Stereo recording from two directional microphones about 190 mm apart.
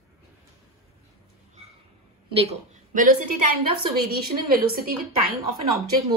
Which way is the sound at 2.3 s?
30° right (ahead or behind).